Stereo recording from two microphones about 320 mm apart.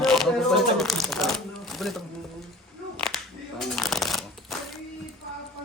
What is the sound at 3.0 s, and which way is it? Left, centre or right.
Shuffling cards, centre.